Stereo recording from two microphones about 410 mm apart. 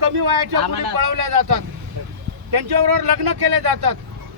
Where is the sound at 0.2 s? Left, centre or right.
Right.